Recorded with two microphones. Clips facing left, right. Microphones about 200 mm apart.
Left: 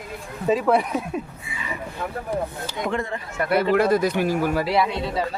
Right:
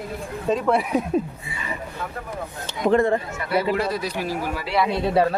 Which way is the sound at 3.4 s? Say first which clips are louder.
Left 8 dB; 55° left (ahead or behind).